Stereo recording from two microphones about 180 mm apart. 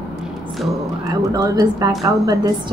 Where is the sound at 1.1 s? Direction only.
20° right (ahead or behind).